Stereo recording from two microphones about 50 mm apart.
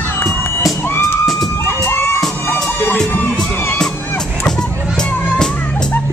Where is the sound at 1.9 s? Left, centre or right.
Left.